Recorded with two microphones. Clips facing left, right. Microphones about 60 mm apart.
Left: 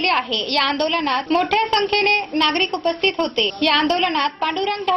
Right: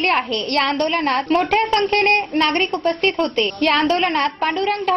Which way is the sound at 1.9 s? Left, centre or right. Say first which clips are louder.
Right 3 dB; right.